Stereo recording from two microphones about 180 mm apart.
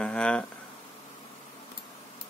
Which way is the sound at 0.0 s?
5° left (ahead or behind).